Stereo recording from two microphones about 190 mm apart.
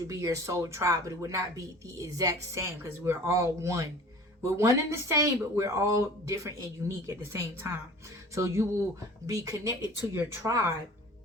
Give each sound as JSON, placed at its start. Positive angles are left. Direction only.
{"t": 0.1, "sound": "speech", "side_deg": -15}